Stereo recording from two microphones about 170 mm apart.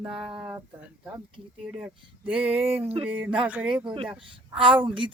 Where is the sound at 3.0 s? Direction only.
10° right (ahead or behind).